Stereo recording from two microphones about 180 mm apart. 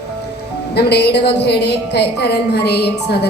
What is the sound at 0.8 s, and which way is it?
A woman's voice, 65° left (ahead or behind).